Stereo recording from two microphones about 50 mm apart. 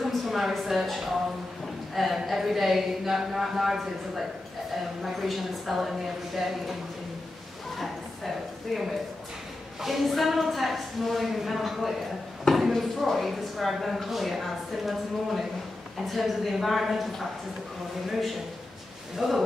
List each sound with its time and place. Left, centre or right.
0.0 s a woman's voice: centre
7.7 s a sound: centre
9.8 s speech: centre
19.1 s speech: centre